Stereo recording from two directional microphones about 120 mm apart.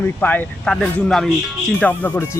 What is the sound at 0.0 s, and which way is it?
Speech, 15° left (ahead or behind).